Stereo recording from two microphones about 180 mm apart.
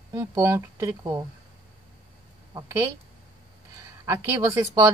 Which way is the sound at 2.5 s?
20° right (ahead or behind).